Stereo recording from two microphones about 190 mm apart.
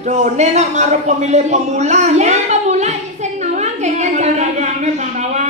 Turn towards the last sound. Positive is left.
turn(degrees=-35)  # may be behind; listen again after turning